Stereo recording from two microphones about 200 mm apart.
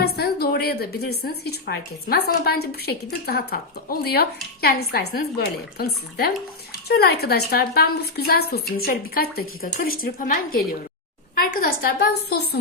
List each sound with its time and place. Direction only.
0.0 s a woman's voice: 55° left (ahead or behind)